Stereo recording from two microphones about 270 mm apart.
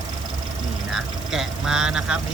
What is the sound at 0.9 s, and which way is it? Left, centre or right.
Speech, centre.